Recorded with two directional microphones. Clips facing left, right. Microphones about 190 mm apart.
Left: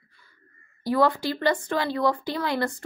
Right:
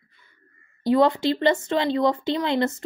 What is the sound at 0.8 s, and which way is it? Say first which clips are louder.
Speech: right 4 dB; 20° right (ahead or behind).